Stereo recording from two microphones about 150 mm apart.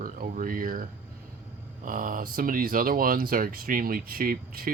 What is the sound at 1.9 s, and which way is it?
Speech, 65° right (ahead or behind).